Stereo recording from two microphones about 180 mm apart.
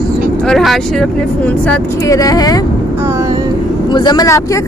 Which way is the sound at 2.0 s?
20° left (ahead or behind).